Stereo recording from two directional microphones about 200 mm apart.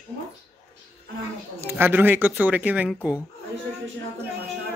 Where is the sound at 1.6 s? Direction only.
10° right (ahead or behind).